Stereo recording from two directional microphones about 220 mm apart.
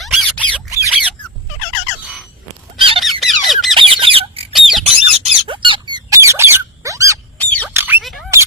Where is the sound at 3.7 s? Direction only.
25° right (ahead or behind).